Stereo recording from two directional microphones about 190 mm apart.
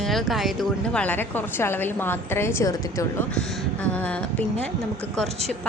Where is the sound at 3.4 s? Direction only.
Centre (ahead or behind).